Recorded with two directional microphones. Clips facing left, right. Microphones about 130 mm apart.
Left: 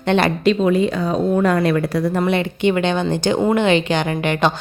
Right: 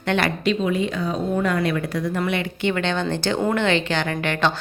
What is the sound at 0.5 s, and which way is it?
A woman's voice, 40° left (ahead or behind).